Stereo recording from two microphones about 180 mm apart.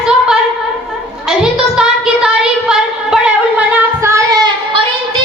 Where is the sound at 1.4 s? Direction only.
5° right (ahead or behind).